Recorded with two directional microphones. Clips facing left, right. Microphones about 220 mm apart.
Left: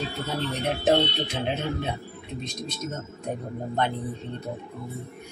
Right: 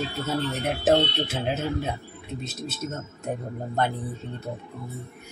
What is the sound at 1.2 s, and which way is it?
Speech, 5° right (ahead or behind).